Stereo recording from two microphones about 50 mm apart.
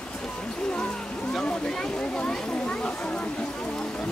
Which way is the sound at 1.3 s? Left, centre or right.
Centre.